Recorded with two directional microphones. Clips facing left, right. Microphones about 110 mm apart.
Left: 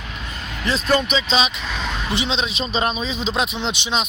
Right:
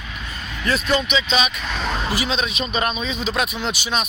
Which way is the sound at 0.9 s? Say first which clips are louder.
Left 3 dB; 40° left (ahead or behind).